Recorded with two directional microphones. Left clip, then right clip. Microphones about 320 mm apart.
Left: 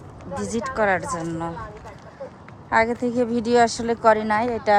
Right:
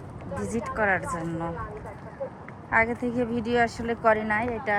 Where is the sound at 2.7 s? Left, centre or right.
Centre.